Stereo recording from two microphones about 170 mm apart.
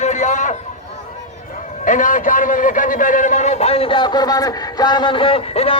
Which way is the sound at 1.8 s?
50° left (ahead or behind).